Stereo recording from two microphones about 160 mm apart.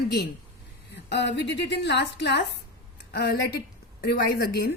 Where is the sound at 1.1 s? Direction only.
90° left.